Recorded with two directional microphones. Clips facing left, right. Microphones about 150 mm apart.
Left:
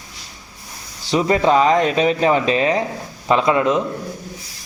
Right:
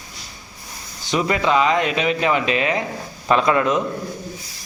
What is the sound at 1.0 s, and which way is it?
Speech, 30° left (ahead or behind).